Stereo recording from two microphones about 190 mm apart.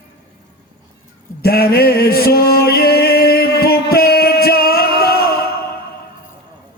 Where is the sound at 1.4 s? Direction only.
55° left (ahead or behind).